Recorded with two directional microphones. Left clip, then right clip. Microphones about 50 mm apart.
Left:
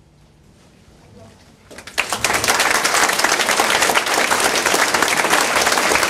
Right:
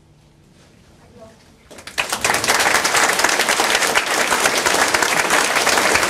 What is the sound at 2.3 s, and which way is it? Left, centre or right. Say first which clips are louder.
Applause: even; left.